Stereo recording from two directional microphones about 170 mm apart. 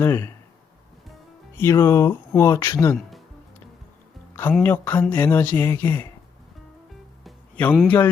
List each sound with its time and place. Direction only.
0.0 s speech: 15° left (ahead or behind)
1.5 s speech: 15° left (ahead or behind)
4.5 s speech: 10° left (ahead or behind)
7.3 s music: 10° left (ahead or behind)
7.8 s speech: 10° left (ahead or behind)